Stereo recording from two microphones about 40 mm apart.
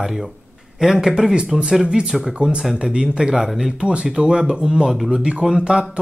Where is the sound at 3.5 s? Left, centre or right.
Centre.